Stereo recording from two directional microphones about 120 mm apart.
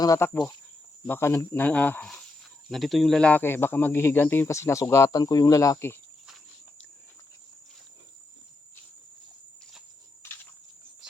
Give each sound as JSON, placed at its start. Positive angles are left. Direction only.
{"t": 0.0, "sound": "speech", "side_deg": 30}
{"t": 2.6, "sound": "speech", "side_deg": 0}